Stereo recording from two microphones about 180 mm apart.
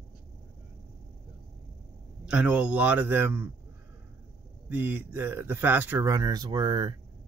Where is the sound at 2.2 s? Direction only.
5° right (ahead or behind).